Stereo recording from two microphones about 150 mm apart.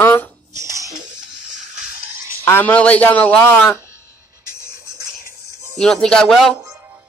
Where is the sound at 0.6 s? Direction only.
20° right (ahead or behind).